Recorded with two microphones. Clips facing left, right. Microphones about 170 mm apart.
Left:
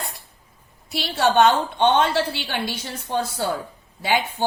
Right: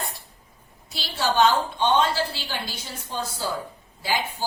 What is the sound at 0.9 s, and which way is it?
A woman's voice, 65° left (ahead or behind).